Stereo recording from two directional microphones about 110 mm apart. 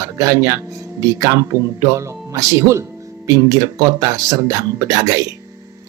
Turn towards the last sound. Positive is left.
turn(degrees=-30)  # may be behind; listen again after turning